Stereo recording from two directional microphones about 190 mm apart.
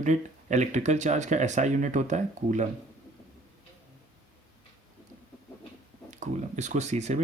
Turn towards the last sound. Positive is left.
turn(degrees=-35)  # may be behind; listen again after turning